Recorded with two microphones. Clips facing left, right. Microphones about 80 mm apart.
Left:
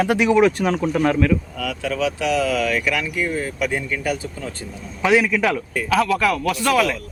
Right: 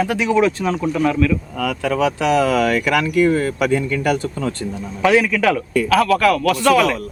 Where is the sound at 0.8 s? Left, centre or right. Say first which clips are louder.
Right 2 dB; left.